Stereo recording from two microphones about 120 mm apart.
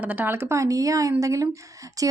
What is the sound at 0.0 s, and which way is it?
Speech, 15° right (ahead or behind).